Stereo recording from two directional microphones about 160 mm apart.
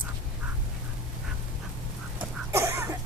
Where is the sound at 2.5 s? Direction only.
15° right (ahead or behind).